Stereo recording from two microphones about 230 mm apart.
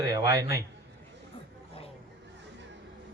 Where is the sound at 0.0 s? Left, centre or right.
Centre.